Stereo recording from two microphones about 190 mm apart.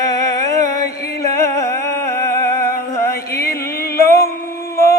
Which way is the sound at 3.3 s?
55° left (ahead or behind).